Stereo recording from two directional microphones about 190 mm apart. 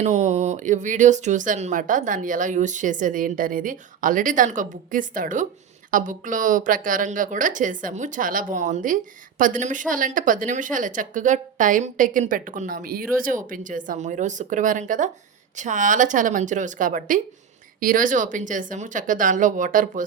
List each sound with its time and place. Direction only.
0.0 s speech: 35° right (ahead or behind)